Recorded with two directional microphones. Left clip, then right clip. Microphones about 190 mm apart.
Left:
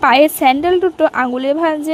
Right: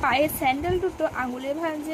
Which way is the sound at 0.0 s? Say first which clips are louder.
Left 12 dB; 50° left (ahead or behind).